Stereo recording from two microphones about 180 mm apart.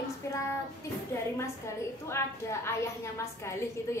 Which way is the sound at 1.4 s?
15° left (ahead or behind).